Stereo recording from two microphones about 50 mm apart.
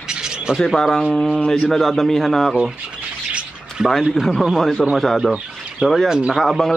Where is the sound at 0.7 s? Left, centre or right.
Centre.